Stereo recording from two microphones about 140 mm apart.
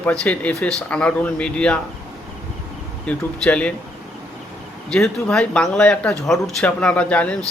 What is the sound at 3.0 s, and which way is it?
Speech, 10° left (ahead or behind).